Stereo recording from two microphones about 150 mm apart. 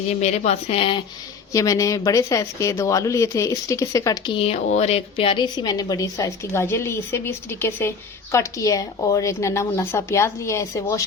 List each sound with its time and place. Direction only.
0.1 s speech: 50° left (ahead or behind)
1.5 s a woman's voice: 20° left (ahead or behind)
4.4 s a woman's voice: 45° left (ahead or behind); by 11.0 s 20° left (ahead or behind)